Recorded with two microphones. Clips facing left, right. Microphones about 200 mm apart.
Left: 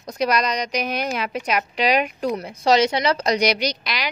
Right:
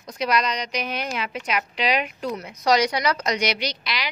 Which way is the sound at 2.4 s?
30° left (ahead or behind).